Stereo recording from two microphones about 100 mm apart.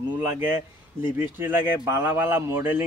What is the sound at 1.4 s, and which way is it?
A man's voice, 20° right (ahead or behind).